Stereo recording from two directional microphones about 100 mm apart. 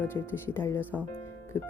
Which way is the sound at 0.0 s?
20° left (ahead or behind).